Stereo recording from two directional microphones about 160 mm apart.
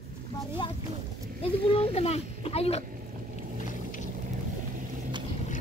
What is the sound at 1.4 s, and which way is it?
Speech, 35° left (ahead or behind).